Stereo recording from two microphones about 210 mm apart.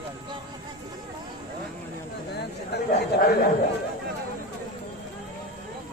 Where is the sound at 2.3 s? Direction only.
50° left (ahead or behind).